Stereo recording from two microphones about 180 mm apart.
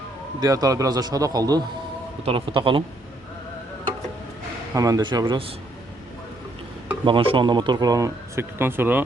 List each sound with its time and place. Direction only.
0.4 s speech: 20° right (ahead or behind)
4.7 s speech: 20° right (ahead or behind)
7.0 s speech: 30° right (ahead or behind); by 9.0 s 10° right (ahead or behind)